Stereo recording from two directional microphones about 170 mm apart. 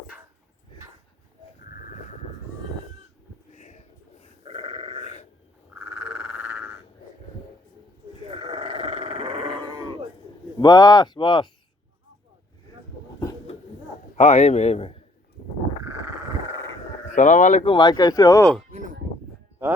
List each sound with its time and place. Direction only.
3.5 s a sound: 45° left (ahead or behind)
4.4 s sheep: 30° right (ahead or behind)
5.9 s frog: 5° right (ahead or behind)
8.3 s grunt: 35° right (ahead or behind)
10.6 s speech: 20° left (ahead or behind)
14.2 s a man's voice: 40° left (ahead or behind)
15.8 s a sound: 10° right (ahead or behind)
17.1 s speech: 45° left (ahead or behind)
17.7 s speech: 25° left (ahead or behind)